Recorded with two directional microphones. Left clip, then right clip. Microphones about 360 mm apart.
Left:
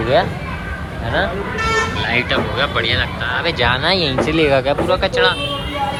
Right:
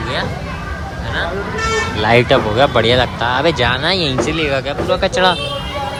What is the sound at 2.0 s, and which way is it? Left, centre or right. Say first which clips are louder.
Speech: right 6 dB; centre.